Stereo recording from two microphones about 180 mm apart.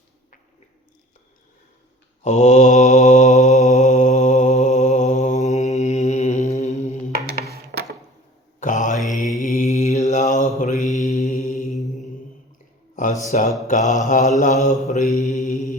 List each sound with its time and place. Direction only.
2.2 s mantra: 40° left (ahead or behind)
7.5 s a sound: 60° right (ahead or behind)
8.6 s mantra: 45° left (ahead or behind)
13.3 s mantra: 45° left (ahead or behind)